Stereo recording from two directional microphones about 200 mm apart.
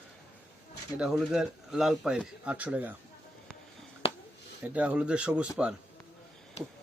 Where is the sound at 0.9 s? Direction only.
Centre (ahead or behind).